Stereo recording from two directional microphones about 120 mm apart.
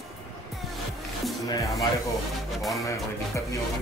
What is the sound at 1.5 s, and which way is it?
Speech, 25° left (ahead or behind).